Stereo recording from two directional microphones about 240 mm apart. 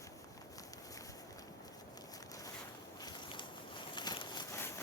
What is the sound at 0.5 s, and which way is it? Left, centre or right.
Walk, centre.